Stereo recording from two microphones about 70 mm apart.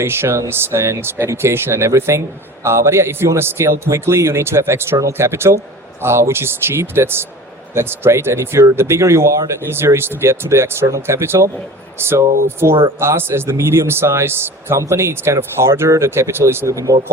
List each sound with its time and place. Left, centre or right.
0.0 s speech: right
16.7 s speech: right